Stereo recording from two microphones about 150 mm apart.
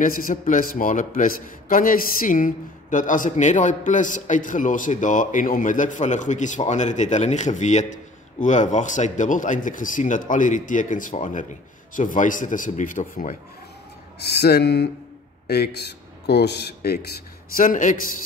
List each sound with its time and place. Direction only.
0.0 s a man's voice: 65° left (ahead or behind)
14.2 s speech: 90° left
17.6 s a man's voice: 65° left (ahead or behind)